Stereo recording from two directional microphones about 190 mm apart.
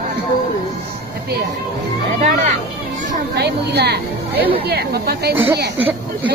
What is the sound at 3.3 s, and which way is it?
Speech, 60° right (ahead or behind).